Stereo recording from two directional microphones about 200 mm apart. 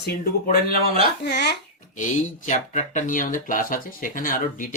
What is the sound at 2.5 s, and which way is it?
Speech, 40° left (ahead or behind).